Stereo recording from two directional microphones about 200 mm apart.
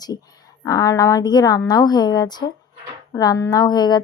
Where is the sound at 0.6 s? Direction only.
15° left (ahead or behind).